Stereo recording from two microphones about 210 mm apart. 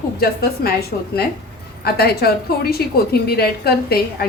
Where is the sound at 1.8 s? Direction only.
50° left (ahead or behind).